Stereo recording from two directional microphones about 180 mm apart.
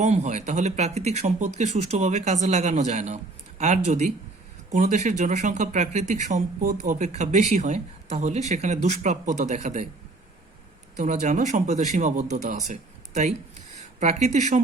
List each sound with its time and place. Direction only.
0.0 s speech: 40° right (ahead or behind)
10.9 s speech: 45° right (ahead or behind)